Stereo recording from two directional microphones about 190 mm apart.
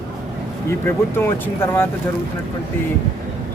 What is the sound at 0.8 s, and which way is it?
Speech, 10° left (ahead or behind).